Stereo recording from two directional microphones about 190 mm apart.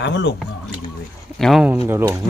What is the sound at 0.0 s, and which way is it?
Speech, 65° left (ahead or behind).